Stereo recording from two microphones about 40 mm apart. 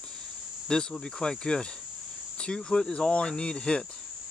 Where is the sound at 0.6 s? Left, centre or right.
Centre.